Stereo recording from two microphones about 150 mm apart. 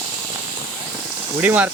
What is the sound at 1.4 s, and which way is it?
Speech, 10° right (ahead or behind).